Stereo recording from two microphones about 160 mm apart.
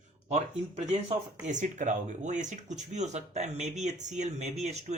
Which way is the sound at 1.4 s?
50° right (ahead or behind).